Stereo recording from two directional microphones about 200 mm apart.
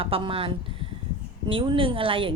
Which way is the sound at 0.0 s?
25° right (ahead or behind).